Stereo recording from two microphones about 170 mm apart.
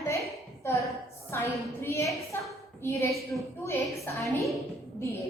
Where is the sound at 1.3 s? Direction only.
15° left (ahead or behind).